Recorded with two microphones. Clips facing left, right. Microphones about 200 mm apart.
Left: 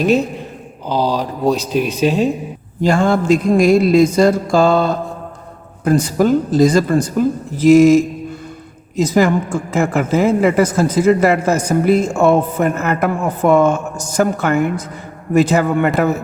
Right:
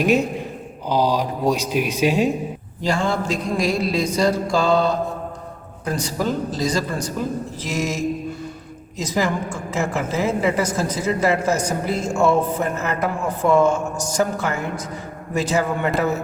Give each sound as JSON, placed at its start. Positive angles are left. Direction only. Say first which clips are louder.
{"t": 0.0, "sound": "speech", "louder": "left 3 dB", "side_deg": -10}
{"t": 2.8, "sound": "a man's voice", "louder": "left 8 dB", "side_deg": 50}